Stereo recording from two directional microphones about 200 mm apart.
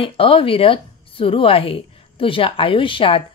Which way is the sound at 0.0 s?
25° left (ahead or behind).